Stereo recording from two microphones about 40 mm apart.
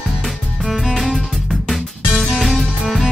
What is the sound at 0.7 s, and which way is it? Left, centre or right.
Music, centre.